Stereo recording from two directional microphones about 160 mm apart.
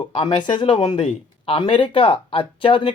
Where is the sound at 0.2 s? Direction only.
35° left (ahead or behind).